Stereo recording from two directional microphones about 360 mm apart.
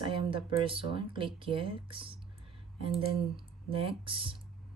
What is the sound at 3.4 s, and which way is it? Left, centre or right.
Speech, centre.